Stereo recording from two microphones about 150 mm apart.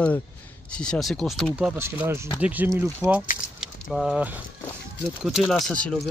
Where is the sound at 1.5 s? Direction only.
10° right (ahead or behind).